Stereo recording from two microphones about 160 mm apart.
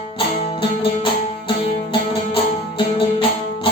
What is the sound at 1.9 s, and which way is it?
Music, 30° left (ahead or behind).